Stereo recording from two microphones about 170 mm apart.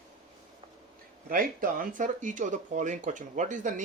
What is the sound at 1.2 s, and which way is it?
Speech, 60° right (ahead or behind).